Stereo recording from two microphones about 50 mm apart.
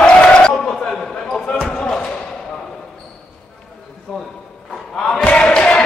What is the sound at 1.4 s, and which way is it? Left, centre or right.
Basketball bounce, centre.